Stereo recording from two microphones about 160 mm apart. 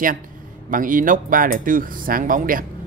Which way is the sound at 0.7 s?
60° right (ahead or behind).